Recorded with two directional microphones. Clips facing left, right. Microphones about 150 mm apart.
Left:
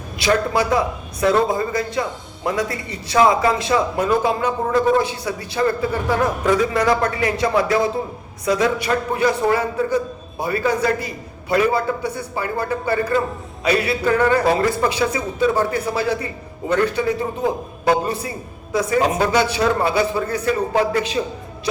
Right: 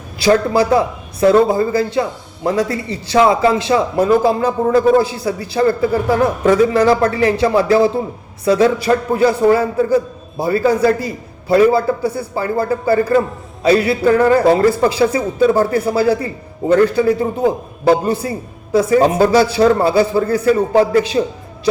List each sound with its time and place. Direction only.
0.2 s a man's voice: 30° right (ahead or behind)